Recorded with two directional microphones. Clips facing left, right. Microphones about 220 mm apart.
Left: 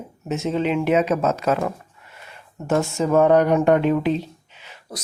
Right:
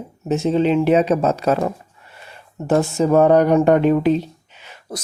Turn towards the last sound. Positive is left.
turn(degrees=-50)  # may be behind; listen again after turning